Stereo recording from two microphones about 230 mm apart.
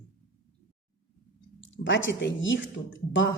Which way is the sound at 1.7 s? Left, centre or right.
Left.